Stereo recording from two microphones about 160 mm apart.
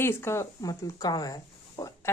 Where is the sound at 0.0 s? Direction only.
15° left (ahead or behind).